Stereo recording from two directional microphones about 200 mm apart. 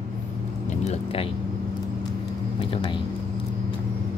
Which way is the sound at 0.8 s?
30° left (ahead or behind).